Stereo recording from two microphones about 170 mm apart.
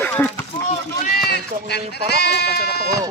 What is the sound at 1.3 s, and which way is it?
Speech, 75° left (ahead or behind).